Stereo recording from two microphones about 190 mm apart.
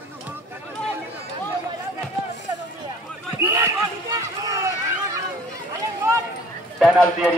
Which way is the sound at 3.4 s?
15° right (ahead or behind).